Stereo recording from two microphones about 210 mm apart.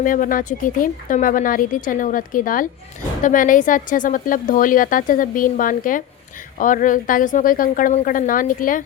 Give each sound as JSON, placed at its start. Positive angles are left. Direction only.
{"t": 0.0, "sound": "a woman's voice", "side_deg": 40}